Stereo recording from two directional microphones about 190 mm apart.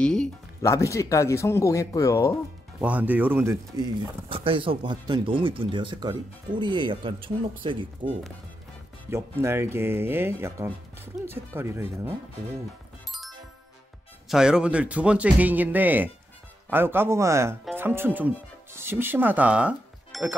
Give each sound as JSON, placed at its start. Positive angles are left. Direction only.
{"t": 0.0, "sound": "music", "side_deg": 5}
{"t": 0.6, "sound": "speech", "side_deg": 15}
{"t": 2.8, "sound": "speech", "side_deg": -5}
{"t": 9.1, "sound": "speech", "side_deg": -15}
{"t": 14.3, "sound": "speech", "side_deg": -5}